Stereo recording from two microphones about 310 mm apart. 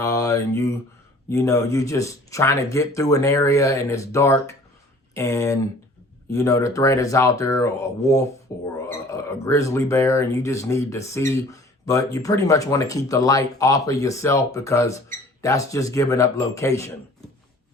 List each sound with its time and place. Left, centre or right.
0.0 s speech: centre